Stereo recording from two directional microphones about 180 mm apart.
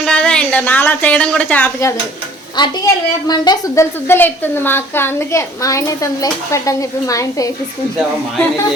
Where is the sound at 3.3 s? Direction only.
20° left (ahead or behind).